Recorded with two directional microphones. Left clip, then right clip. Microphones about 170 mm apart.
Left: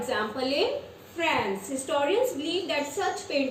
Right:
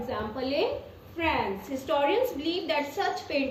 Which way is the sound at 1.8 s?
15° left (ahead or behind).